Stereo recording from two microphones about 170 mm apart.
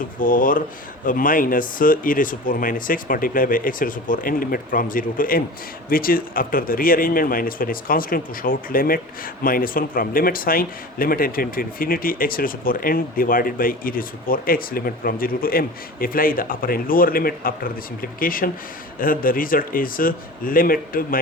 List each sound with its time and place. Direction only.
0.2 s speech: 55° left (ahead or behind)